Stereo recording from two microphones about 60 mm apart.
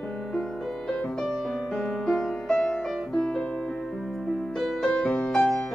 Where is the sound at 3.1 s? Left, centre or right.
Centre.